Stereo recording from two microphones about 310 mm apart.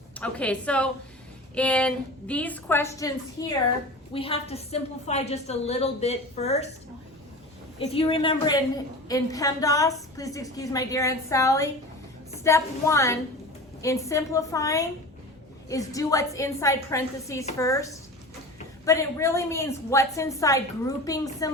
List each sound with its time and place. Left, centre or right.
0.2 s a woman's voice: centre; by 6.7 s left
7.8 s a woman's voice: centre
18.9 s a woman's voice: centre